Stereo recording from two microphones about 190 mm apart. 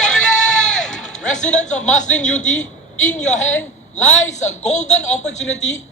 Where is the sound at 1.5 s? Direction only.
40° left (ahead or behind).